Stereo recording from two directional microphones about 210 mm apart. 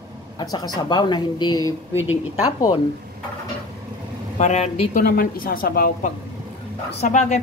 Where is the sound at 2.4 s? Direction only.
20° left (ahead or behind).